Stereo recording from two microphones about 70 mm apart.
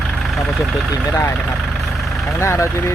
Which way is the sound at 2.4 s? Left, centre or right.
Left.